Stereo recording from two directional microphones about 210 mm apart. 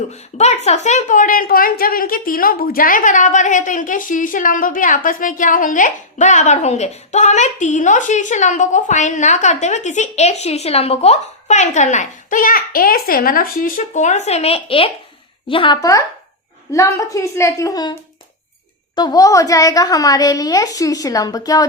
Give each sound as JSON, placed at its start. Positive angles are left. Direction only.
{"t": 0.1, "sound": "a woman's voice", "side_deg": 30}
{"t": 18.9, "sound": "a woman's voice", "side_deg": 20}